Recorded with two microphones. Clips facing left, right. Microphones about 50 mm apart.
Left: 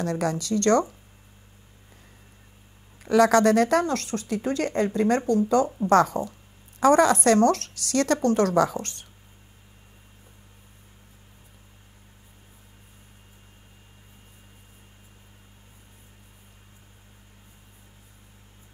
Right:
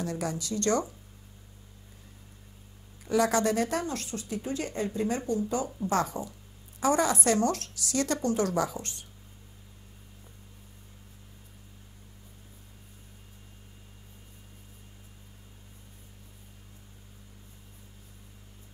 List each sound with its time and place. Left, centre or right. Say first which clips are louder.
0.0 s speech: left 6 dB; left
3.0 s speech: left 7 dB; left